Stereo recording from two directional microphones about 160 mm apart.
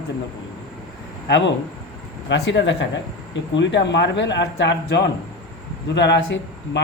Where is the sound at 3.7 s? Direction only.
90° left.